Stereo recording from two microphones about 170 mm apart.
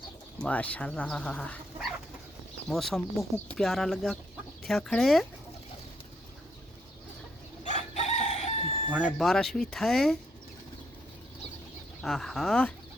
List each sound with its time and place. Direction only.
0.4 s speech: 10° left (ahead or behind)
7.9 s chicken: 40° left (ahead or behind)
8.9 s speech: 10° right (ahead or behind)
12.0 s speech: centre (ahead or behind)